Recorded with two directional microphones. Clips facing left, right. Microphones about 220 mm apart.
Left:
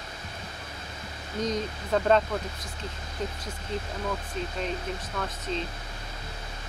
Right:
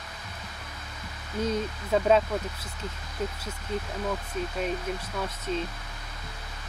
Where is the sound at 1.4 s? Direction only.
5° right (ahead or behind).